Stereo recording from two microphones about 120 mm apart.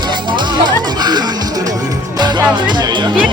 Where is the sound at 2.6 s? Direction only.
40° right (ahead or behind).